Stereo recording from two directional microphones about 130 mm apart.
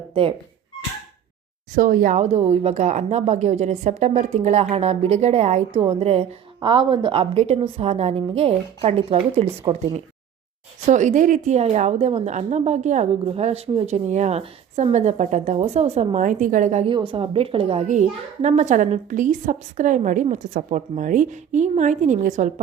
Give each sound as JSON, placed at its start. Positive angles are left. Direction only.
{"t": 0.1, "sound": "speech", "side_deg": -45}
{"t": 1.7, "sound": "speech", "side_deg": -90}
{"t": 5.8, "sound": "a woman's voice", "side_deg": -45}
{"t": 6.6, "sound": "a woman's voice", "side_deg": -40}
{"t": 10.8, "sound": "speech", "side_deg": -70}
{"t": 13.2, "sound": "speech", "side_deg": -55}
{"t": 16.8, "sound": "a woman's voice", "side_deg": -40}
{"t": 17.8, "sound": "a woman's voice", "side_deg": -65}
{"t": 20.3, "sound": "speech", "side_deg": -90}
{"t": 20.7, "sound": "a woman's voice", "side_deg": -65}